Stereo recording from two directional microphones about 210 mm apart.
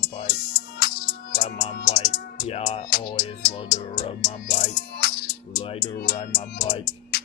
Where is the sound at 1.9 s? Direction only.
30° left (ahead or behind).